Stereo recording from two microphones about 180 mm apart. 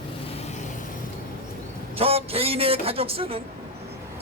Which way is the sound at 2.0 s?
35° right (ahead or behind).